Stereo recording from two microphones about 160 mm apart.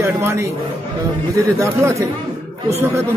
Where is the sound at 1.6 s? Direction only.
20° right (ahead or behind).